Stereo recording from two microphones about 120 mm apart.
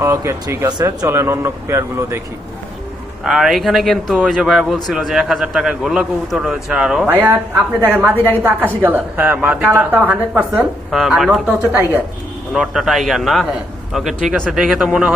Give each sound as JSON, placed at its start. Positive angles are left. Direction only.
{"t": 0.0, "sound": "speech", "side_deg": -25}
{"t": 3.2, "sound": "a woman's voice", "side_deg": -5}
{"t": 10.5, "sound": "speech", "side_deg": 0}
{"t": 11.8, "sound": "a woman's voice", "side_deg": -15}
{"t": 12.5, "sound": "speech", "side_deg": -5}